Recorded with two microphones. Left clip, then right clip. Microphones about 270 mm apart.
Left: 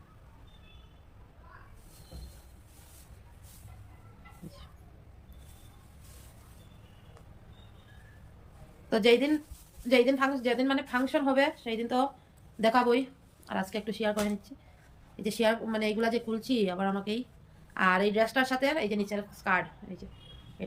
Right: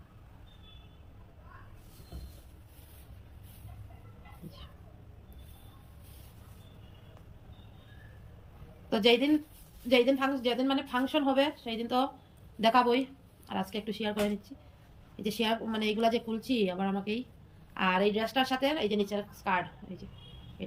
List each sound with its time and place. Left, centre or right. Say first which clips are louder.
8.9 s a woman's voice: left 1 dB; centre
20.6 s pig: left 2 dB; centre